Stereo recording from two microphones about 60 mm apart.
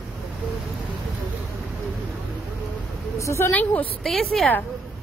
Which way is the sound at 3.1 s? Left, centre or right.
Left.